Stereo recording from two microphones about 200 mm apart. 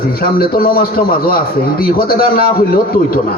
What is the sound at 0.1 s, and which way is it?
A man's voice, 50° left (ahead or behind).